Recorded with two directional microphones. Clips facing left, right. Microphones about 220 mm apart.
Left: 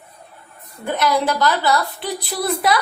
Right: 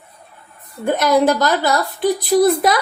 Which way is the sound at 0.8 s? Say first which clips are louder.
Right 5 dB; 45° right (ahead or behind).